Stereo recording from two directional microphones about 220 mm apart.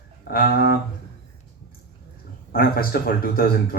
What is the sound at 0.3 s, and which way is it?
Speech, 45° left (ahead or behind).